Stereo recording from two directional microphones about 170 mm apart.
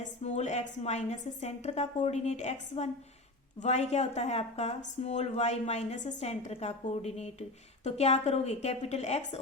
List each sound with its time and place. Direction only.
0.0 s a woman's voice: 40° left (ahead or behind)